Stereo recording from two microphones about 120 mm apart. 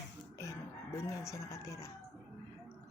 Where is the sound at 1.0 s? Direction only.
25° left (ahead or behind).